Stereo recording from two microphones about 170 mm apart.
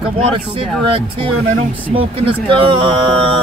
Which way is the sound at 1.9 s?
30° right (ahead or behind).